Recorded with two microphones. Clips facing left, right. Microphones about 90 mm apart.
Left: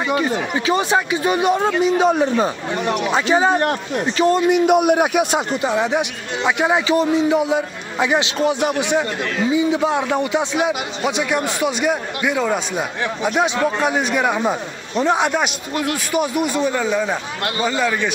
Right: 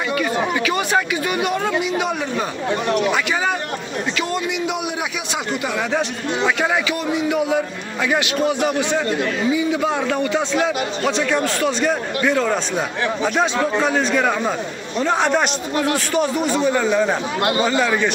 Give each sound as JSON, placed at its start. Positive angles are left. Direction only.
{"t": 0.1, "sound": "speech", "side_deg": 25}
{"t": 4.2, "sound": "a man's voice", "side_deg": 40}
{"t": 5.5, "sound": "a man's voice", "side_deg": 25}